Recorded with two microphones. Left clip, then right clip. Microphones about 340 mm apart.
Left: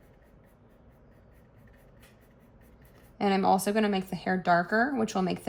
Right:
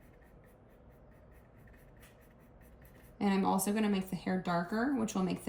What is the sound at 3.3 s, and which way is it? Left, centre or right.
Speech, centre.